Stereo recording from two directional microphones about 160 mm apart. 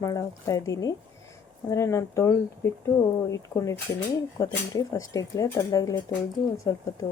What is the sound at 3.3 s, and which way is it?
A woman's voice, 20° left (ahead or behind).